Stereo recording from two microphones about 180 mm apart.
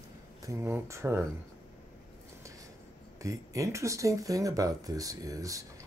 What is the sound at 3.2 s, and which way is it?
Speech, 15° right (ahead or behind).